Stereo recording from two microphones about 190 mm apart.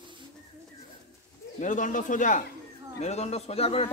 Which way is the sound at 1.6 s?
40° left (ahead or behind).